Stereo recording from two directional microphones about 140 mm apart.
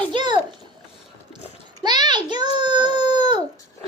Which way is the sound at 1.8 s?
30° right (ahead or behind).